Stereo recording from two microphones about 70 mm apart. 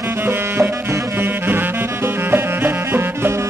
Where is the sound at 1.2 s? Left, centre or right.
Right.